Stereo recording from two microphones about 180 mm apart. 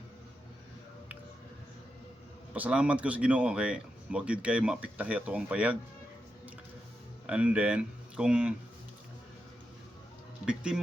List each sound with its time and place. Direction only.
2.5 s speech: 5° right (ahead or behind)
7.3 s speech: 5° right (ahead or behind)
10.4 s music: 5° right (ahead or behind)